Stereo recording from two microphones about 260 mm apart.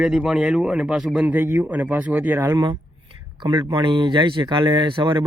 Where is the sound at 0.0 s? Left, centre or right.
Centre.